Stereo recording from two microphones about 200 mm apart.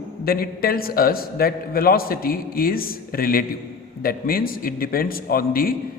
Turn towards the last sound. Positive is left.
turn(degrees=45)  # may be behind; listen again after turning